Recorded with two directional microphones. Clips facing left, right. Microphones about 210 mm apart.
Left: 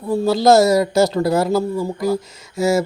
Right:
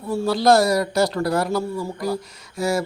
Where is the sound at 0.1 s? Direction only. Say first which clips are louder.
Left 4 dB; 25° left (ahead or behind).